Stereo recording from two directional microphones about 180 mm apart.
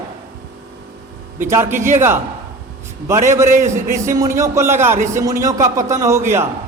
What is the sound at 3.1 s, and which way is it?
A man's voice, 15° right (ahead or behind).